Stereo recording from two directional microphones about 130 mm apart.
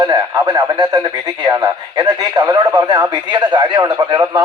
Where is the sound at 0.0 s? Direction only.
30° right (ahead or behind).